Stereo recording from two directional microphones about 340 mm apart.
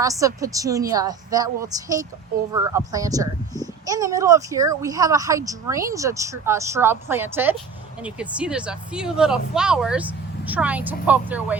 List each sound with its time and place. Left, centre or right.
0.0 s a child's voice: centre